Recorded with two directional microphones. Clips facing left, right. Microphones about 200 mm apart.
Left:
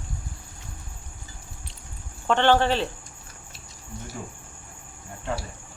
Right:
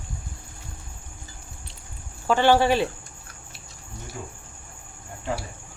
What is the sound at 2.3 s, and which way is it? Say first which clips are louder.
Speech: right 2 dB; 10° right (ahead or behind).